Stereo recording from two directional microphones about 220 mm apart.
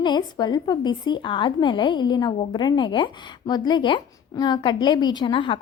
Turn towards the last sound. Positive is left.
turn(degrees=20)  # may be behind; listen again after turning